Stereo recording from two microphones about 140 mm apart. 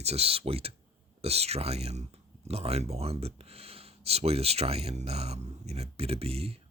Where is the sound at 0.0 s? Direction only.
45° right (ahead or behind).